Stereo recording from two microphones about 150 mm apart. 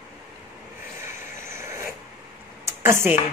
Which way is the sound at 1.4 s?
20° right (ahead or behind).